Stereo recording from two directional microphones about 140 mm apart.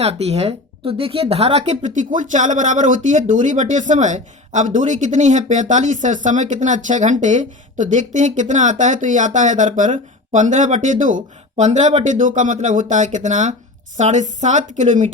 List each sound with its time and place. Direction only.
0.0 s speech: 50° right (ahead or behind)